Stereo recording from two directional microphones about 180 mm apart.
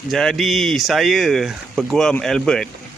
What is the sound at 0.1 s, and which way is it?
Speech, centre (ahead or behind).